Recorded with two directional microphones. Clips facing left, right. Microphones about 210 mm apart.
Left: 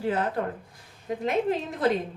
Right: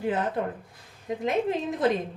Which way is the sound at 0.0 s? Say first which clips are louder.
Even; 20° right (ahead or behind).